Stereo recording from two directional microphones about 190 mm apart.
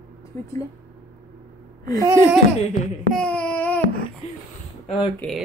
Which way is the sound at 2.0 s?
15° right (ahead or behind).